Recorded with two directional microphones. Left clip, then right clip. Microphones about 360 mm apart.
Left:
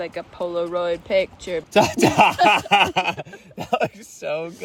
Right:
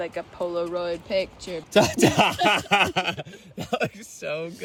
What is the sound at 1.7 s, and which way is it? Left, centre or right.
Speech, centre.